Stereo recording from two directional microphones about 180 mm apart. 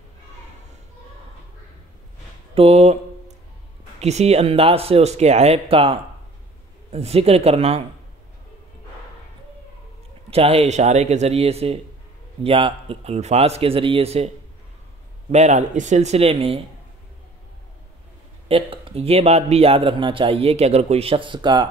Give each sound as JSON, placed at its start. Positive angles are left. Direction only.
{"t": 2.5, "sound": "a sound", "side_deg": -35}
{"t": 4.0, "sound": "speech", "side_deg": -35}
{"t": 10.3, "sound": "speech", "side_deg": -35}
{"t": 15.3, "sound": "speech", "side_deg": -40}
{"t": 18.5, "sound": "speech", "side_deg": -30}